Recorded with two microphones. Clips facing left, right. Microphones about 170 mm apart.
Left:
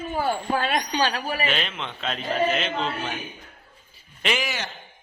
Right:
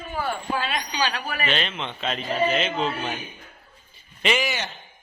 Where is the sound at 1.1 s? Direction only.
35° left (ahead or behind).